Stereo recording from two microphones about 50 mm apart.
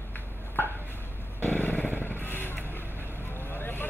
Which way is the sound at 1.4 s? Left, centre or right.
Left.